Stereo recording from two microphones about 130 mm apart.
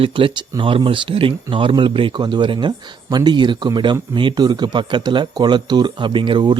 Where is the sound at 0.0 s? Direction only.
40° right (ahead or behind).